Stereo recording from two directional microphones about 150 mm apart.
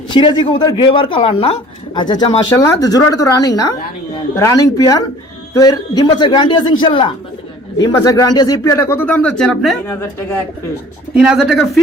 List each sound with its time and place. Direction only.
0.1 s a woman's voice: 35° left (ahead or behind); by 9.7 s centre (ahead or behind)
11.1 s speech: 5° right (ahead or behind)